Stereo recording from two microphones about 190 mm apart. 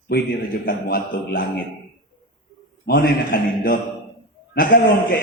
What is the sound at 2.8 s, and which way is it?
A man's voice, 50° left (ahead or behind).